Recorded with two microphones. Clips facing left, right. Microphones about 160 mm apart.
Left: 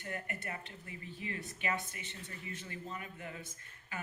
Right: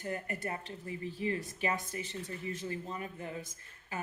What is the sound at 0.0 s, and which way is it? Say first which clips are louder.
A woman's voice: right 5 dB; 35° right (ahead or behind).